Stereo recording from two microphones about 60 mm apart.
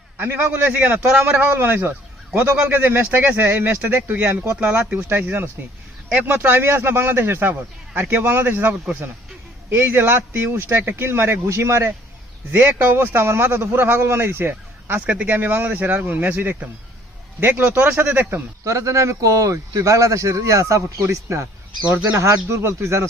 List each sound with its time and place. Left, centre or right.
0.2 s a man's voice: right
12.5 s a man's voice: right
15.0 s speech: right
15.3 s a man's voice: right
18.6 s speech: right
21.8 s a man's voice: right
22.1 s speech: right